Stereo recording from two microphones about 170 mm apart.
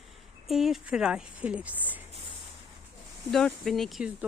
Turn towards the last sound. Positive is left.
turn(degrees=0)  # may be behind; listen again after turning